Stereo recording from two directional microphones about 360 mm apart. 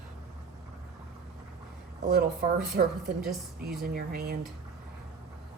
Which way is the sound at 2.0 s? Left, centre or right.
Right.